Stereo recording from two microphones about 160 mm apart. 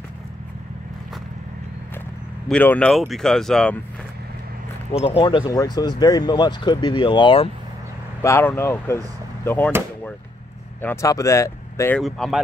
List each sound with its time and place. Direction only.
2.4 s speech: 10° left (ahead or behind)
4.9 s speech: 35° left (ahead or behind)
8.2 s speech: 15° left (ahead or behind)
10.8 s speech: 15° left (ahead or behind)
12.0 s speech: centre (ahead or behind)